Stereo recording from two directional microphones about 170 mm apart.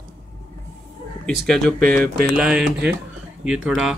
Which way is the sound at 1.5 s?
5° left (ahead or behind).